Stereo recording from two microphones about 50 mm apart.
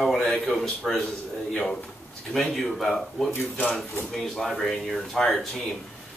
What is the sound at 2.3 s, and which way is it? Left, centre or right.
A man's voice, centre.